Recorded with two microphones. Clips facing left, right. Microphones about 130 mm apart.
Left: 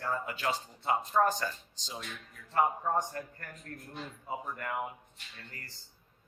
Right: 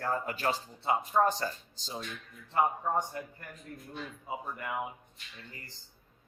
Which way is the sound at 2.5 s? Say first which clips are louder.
Even; 10° right (ahead or behind).